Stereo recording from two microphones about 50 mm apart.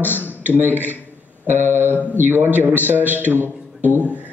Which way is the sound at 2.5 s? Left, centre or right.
Right.